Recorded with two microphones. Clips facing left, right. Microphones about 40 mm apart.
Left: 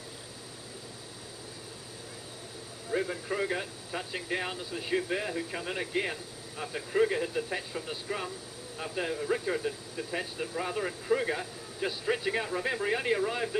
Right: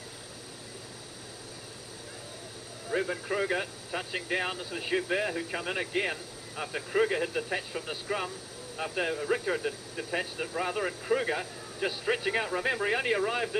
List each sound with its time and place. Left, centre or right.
2.9 s speech: centre